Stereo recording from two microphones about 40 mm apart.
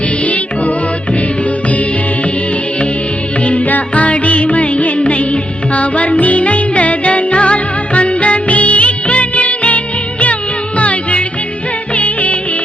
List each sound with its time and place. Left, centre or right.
3.4 s music: left